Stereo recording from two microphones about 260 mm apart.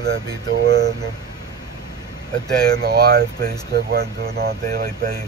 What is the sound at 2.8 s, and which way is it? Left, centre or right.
Speech, right.